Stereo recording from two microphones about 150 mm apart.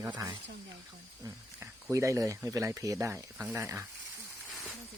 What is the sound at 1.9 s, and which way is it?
Speech, 20° right (ahead or behind).